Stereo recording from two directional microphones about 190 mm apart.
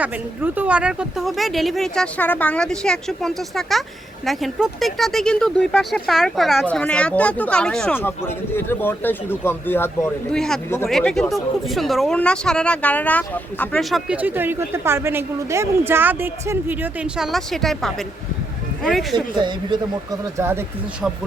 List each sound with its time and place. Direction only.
0.0 s speech: 10° right (ahead or behind)
19.1 s speech: 25° right (ahead or behind)